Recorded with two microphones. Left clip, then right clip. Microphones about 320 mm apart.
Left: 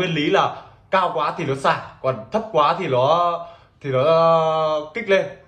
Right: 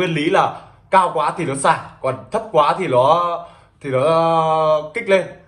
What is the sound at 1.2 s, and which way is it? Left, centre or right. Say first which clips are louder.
A man's voice: right 3 dB; right.